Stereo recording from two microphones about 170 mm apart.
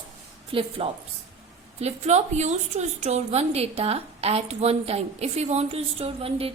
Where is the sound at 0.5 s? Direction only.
30° right (ahead or behind).